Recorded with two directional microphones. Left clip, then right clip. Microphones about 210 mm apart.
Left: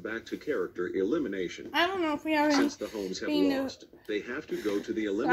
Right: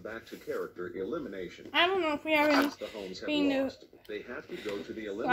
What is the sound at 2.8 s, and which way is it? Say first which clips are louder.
Speech: left 5 dB; 40° left (ahead or behind).